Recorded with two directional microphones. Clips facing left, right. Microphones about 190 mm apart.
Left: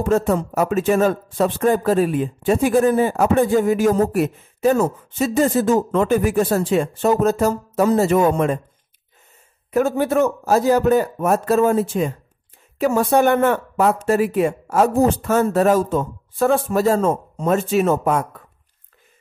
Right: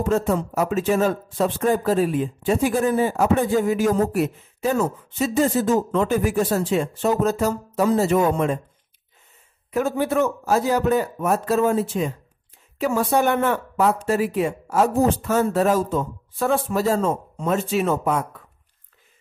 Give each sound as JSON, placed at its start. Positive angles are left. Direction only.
{"t": 0.1, "sound": "speech", "side_deg": 55}
{"t": 9.7, "sound": "speech", "side_deg": 50}